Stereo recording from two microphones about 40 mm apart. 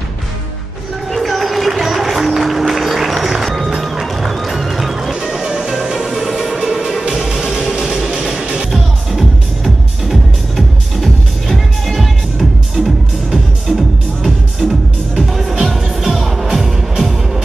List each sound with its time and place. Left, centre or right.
1.1 s music: centre
8.4 s music: right
10.0 s music: centre
15.1 s music: centre